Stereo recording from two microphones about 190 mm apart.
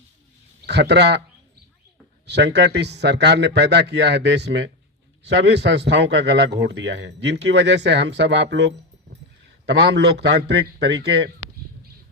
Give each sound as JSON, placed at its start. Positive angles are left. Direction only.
{"t": 0.6, "sound": "speech", "side_deg": -60}
{"t": 2.2, "sound": "a man's voice", "side_deg": -65}